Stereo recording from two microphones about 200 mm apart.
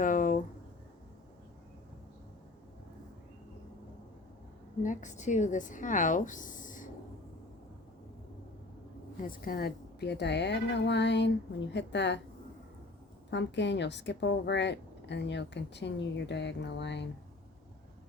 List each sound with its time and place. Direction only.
0.0 s a sound: 40° left (ahead or behind)
4.8 s speech: 40° left (ahead or behind)
9.2 s a woman's voice: 45° left (ahead or behind)
13.3 s a woman's voice: 60° left (ahead or behind)